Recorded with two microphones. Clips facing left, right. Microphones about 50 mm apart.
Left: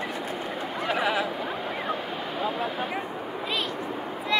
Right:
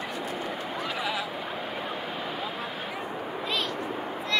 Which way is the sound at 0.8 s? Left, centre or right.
Left.